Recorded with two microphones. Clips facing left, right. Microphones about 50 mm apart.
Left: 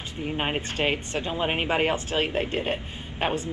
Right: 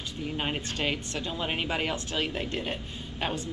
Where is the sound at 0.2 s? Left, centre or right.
Left.